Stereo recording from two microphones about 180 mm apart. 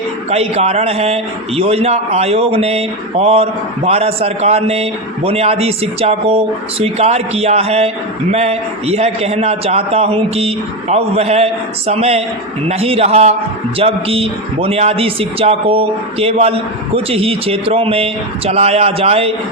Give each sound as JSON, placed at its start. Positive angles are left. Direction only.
{"t": 0.3, "sound": "a man's voice", "side_deg": -35}